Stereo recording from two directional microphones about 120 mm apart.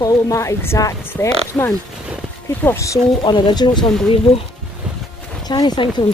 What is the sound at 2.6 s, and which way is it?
Speech, 20° left (ahead or behind).